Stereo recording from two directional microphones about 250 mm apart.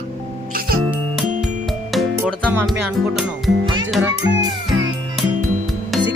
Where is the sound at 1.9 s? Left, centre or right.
Centre.